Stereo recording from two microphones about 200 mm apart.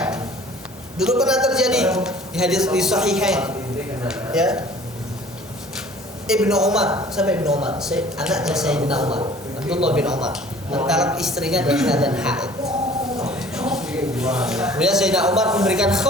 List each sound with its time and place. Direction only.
0.9 s a man's voice: centre (ahead or behind)
6.2 s a man's voice: 5° right (ahead or behind)
9.0 s a man's voice: 30° right (ahead or behind)
9.6 s a man's voice: 5° right (ahead or behind)